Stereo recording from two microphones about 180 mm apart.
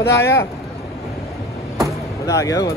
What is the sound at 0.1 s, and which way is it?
Speech, 15° left (ahead or behind).